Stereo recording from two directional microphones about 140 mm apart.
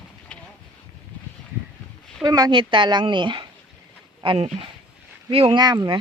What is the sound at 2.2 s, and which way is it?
Speech, 30° right (ahead or behind).